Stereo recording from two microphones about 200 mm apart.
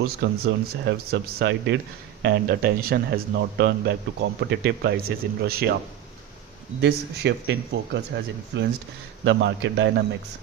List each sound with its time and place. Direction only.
0.0 s a man's voice: 50° right (ahead or behind)
6.8 s speech: 55° right (ahead or behind)